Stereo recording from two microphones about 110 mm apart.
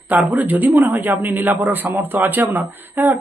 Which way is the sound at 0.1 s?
15° right (ahead or behind).